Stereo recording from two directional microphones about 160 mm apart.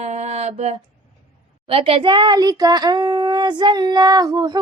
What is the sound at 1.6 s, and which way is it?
Child singing, 35° right (ahead or behind).